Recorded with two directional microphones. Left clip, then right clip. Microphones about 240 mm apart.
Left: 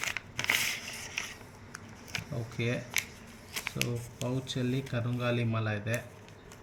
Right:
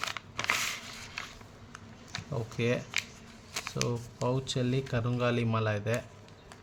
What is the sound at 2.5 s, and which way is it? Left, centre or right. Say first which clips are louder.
Speech: right 4 dB; right.